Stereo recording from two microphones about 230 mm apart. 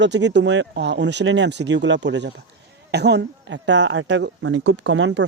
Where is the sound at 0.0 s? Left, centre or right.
Right.